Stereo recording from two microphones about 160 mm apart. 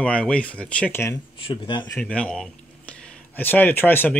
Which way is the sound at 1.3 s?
30° left (ahead or behind).